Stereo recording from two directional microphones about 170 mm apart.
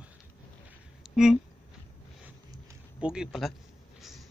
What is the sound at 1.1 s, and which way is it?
Speech, centre (ahead or behind).